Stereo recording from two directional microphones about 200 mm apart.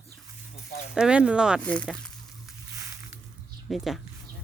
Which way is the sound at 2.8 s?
15° right (ahead or behind).